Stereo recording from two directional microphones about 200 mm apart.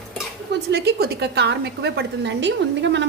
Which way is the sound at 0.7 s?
50° right (ahead or behind).